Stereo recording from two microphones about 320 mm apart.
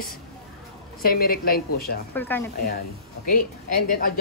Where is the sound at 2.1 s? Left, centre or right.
Centre.